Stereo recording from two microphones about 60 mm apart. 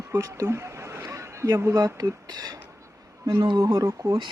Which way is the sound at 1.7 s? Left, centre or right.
Right.